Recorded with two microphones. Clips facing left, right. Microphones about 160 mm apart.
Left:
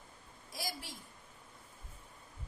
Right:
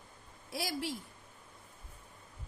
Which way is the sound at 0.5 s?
65° right (ahead or behind).